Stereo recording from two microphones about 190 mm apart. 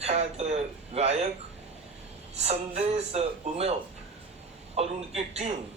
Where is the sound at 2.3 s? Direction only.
35° right (ahead or behind).